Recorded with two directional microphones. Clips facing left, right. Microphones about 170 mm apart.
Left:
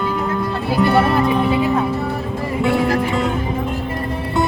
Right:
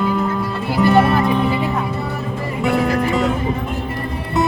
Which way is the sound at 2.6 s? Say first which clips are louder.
Even; centre (ahead or behind).